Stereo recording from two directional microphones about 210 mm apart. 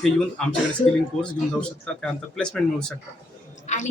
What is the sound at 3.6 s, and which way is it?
Speech, 35° left (ahead or behind).